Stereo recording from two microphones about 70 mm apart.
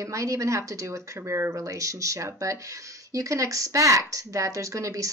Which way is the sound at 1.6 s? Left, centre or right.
Right.